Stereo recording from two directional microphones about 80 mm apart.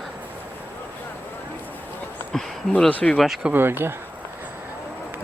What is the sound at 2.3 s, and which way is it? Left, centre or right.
Speech, centre.